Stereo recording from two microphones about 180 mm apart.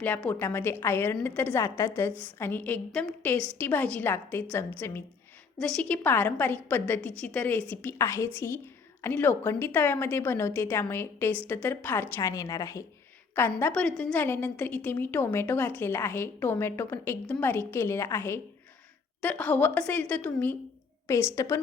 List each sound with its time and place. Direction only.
0.0 s a woman's voice: 10° left (ahead or behind)